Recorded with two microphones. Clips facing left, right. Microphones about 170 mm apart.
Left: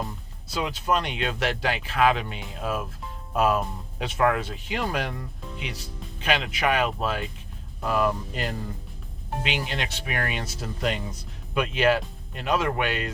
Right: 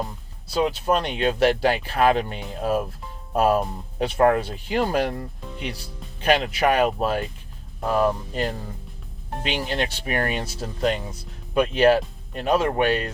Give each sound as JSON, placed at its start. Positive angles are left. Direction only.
{"t": 0.0, "sound": "speech", "side_deg": -30}